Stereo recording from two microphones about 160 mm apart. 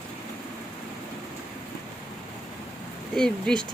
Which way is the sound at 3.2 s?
5° left (ahead or behind).